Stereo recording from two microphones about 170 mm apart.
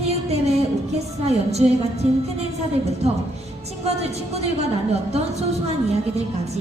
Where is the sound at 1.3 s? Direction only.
40° right (ahead or behind).